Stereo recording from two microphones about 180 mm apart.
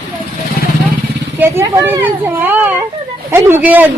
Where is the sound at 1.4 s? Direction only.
15° right (ahead or behind).